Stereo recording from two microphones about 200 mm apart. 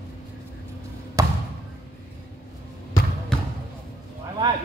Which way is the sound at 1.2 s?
15° right (ahead or behind).